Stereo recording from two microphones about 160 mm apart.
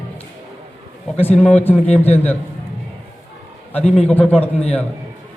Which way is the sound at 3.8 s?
40° left (ahead or behind).